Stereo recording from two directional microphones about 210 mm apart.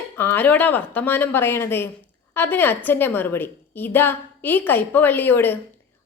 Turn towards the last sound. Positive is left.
turn(degrees=10)  # may be behind; listen again after turning